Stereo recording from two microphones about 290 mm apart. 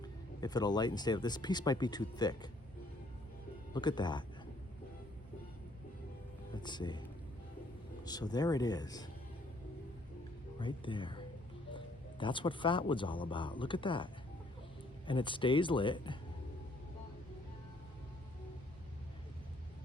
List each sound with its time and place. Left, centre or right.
0.0 s speech: centre
3.8 s speech: centre
6.6 s speech: centre
8.0 s speech: centre
10.6 s speech: centre
12.2 s speech: centre